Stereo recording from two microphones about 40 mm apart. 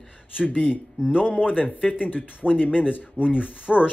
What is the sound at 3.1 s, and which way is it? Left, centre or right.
Speech, right.